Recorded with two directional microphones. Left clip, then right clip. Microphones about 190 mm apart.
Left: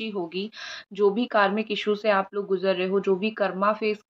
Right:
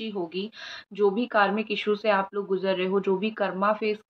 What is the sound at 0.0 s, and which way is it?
A woman's voice, 30° left (ahead or behind).